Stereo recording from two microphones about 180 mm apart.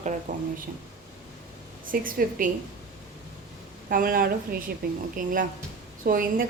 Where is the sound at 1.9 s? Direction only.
50° right (ahead or behind).